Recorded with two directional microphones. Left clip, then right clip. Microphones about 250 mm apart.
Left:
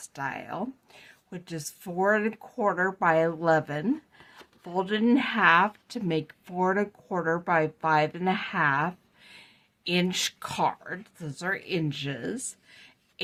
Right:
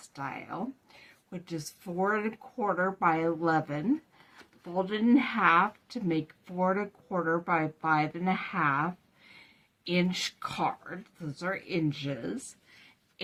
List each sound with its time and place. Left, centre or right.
0.1 s speech: left